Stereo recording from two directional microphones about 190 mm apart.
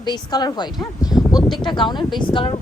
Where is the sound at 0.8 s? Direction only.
20° left (ahead or behind).